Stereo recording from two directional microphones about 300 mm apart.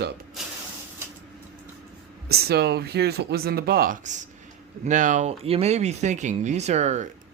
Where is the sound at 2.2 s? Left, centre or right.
Right.